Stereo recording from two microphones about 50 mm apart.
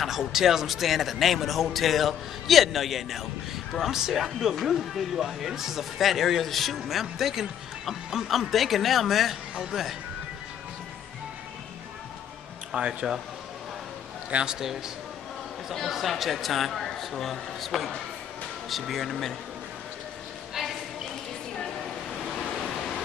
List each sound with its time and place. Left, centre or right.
0.0 s speech: centre
12.7 s speech: centre
14.4 s speech: centre
15.9 s speech: centre
20.5 s a sound: centre
22.5 s a sound: centre